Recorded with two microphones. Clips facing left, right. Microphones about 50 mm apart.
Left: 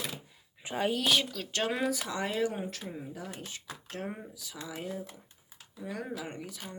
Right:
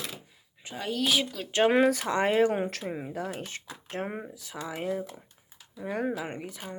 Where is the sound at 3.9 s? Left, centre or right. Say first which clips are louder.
Right 5 dB; right.